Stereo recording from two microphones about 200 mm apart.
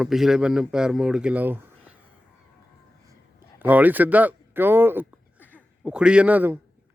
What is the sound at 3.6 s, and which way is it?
A man's voice, 10° right (ahead or behind).